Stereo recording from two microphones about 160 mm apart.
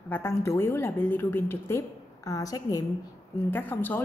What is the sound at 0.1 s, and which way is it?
A woman's voice, 15° left (ahead or behind).